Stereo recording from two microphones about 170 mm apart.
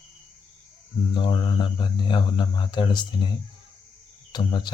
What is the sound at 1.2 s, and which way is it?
Speech, 25° left (ahead or behind).